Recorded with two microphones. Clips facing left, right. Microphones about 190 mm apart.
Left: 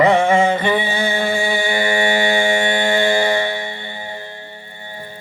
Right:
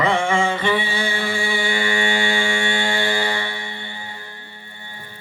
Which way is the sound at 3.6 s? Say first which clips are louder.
Left 5 dB; 20° left (ahead or behind).